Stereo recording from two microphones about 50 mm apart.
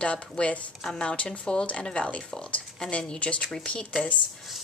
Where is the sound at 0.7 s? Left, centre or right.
Centre.